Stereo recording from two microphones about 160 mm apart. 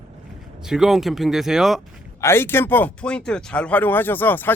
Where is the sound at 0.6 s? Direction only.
5° right (ahead or behind).